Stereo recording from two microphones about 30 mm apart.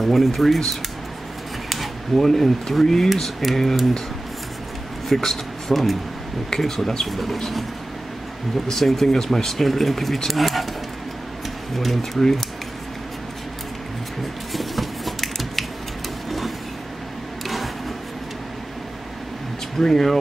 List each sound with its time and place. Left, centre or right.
0.0 s speech: centre
2.1 s speech: centre
5.1 s speech: centre
7.1 s speech: centre
8.6 s speech: centre
11.7 s speech: centre
14.5 s a sound: centre
19.8 s speech: centre